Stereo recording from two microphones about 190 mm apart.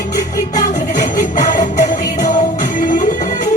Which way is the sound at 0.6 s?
40° left (ahead or behind).